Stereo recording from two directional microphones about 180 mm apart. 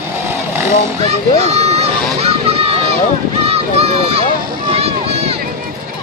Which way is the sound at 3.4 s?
35° right (ahead or behind).